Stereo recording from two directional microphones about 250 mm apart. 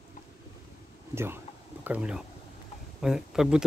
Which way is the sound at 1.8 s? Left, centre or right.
Centre.